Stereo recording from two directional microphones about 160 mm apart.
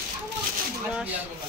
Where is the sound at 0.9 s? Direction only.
10° right (ahead or behind).